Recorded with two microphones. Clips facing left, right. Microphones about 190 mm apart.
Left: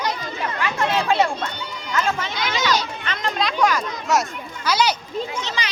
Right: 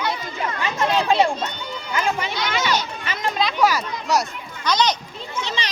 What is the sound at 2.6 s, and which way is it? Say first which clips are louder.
Speech: left 1 dB; 10° right (ahead or behind).